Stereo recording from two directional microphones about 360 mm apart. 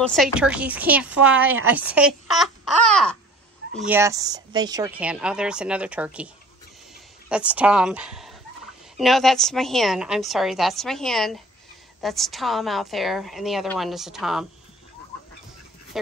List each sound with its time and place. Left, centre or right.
0.0 s speech: centre